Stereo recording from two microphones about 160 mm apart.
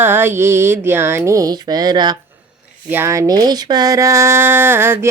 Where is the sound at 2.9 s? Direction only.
15° right (ahead or behind).